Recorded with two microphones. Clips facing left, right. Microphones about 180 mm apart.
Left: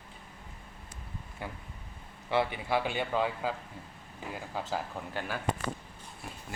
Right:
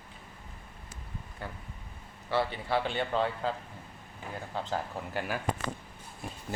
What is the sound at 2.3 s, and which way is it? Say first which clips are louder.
Speech: left 1 dB; 15° left (ahead or behind).